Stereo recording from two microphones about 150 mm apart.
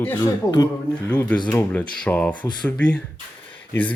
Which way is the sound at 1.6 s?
10° left (ahead or behind).